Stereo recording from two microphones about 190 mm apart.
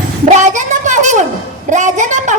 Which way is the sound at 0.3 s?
40° right (ahead or behind).